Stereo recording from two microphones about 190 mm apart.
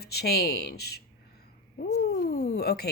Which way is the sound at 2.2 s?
55° left (ahead or behind).